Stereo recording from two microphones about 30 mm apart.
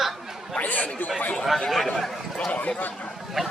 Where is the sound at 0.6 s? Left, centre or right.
Left.